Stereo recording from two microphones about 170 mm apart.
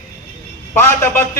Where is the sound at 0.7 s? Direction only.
15° left (ahead or behind).